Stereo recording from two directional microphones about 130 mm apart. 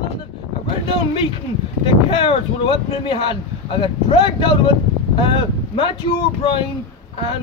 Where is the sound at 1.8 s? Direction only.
40° left (ahead or behind).